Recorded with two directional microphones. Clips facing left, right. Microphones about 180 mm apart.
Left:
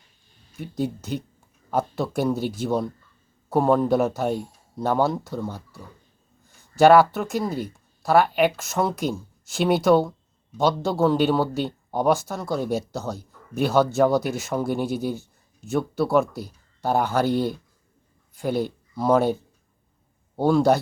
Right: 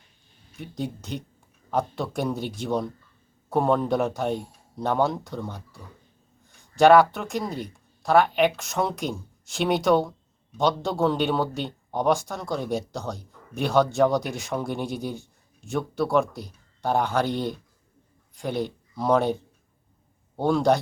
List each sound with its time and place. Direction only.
0.6 s a man's voice: 5° left (ahead or behind)